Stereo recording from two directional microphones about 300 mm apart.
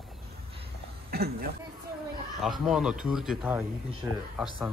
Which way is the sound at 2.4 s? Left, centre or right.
Centre.